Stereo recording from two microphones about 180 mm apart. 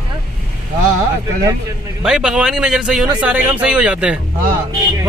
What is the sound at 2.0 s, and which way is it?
Speech, 5° right (ahead or behind).